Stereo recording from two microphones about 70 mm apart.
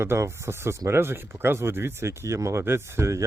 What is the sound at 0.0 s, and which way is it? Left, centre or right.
Speech, right.